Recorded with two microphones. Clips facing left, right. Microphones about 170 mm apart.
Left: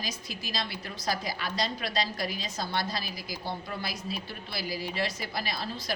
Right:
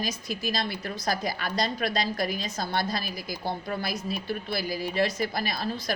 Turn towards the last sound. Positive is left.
turn(degrees=-50)  # may be behind; listen again after turning